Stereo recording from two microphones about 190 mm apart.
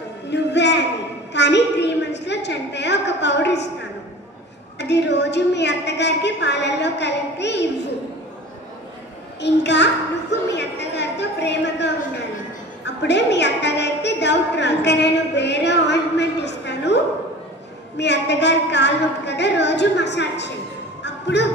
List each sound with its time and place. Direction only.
0.3 s a sound: 65° left (ahead or behind)
4.7 s a woman's voice: 65° left (ahead or behind)
9.4 s a woman's voice: 65° left (ahead or behind)
10.5 s a sound: 65° left (ahead or behind)
12.8 s a woman's voice: 65° left (ahead or behind)
21.0 s music: 65° left (ahead or behind)